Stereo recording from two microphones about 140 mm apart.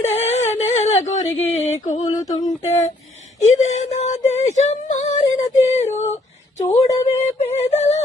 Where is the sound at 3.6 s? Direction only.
55° left (ahead or behind).